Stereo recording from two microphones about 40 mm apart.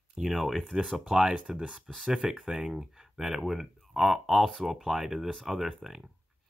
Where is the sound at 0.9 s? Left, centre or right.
Centre.